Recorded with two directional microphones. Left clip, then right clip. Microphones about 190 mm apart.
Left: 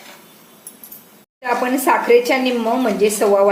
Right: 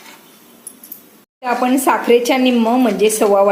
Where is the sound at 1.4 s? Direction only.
25° right (ahead or behind).